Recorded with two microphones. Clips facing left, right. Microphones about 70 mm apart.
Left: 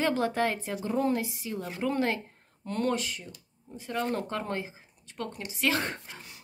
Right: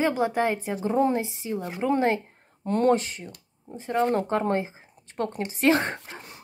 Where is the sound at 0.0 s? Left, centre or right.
Centre.